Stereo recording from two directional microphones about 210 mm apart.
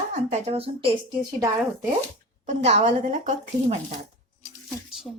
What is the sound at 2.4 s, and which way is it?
A woman's voice, 35° right (ahead or behind).